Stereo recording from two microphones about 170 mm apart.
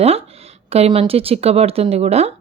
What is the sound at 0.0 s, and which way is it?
Speech, 35° right (ahead or behind).